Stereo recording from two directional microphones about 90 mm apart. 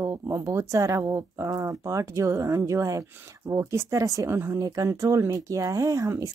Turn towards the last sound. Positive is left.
turn(degrees=-35)  # may be behind; listen again after turning